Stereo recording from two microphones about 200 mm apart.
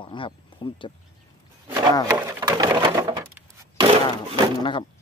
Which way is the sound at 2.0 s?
15° right (ahead or behind).